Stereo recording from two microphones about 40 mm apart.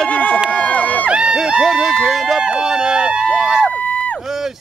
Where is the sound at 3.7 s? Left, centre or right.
Left.